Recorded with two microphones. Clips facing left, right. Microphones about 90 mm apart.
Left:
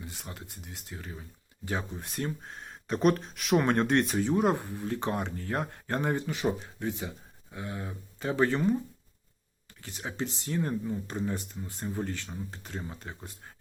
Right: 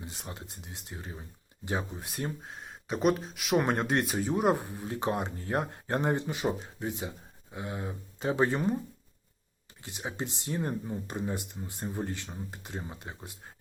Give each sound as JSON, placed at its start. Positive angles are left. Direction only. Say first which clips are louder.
{"t": 0.0, "sound": "speech", "louder": "right 1 dB", "side_deg": -20}
{"t": 9.8, "sound": "speech", "louder": "left 1 dB", "side_deg": -20}